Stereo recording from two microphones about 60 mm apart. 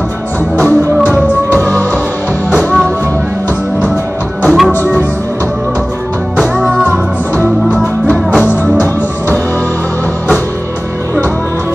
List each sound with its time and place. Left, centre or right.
4.5 s music: centre
4.7 s music: left
6.3 s music: centre